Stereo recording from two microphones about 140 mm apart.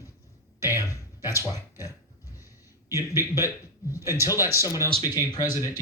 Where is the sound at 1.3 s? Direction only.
25° left (ahead or behind).